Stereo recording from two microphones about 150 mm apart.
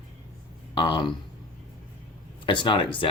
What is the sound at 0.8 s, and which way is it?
Speech, 30° left (ahead or behind).